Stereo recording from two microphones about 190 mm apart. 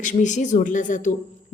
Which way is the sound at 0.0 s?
40° left (ahead or behind).